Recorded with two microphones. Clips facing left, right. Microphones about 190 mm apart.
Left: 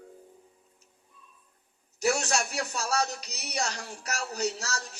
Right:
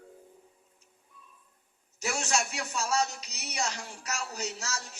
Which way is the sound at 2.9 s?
65° left (ahead or behind).